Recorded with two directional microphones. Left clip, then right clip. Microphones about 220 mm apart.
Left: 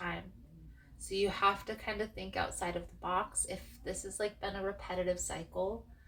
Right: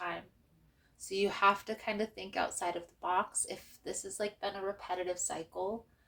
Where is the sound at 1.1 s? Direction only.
45° right (ahead or behind).